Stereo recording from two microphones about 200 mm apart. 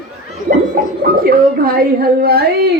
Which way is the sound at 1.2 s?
45° right (ahead or behind).